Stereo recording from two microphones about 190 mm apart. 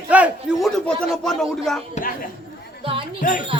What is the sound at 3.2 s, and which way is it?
Speech, 45° left (ahead or behind).